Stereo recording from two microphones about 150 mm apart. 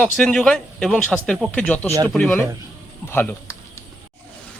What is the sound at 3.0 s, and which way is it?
Speech, 15° left (ahead or behind).